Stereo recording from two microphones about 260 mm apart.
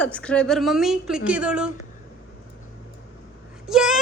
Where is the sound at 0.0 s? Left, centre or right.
Centre.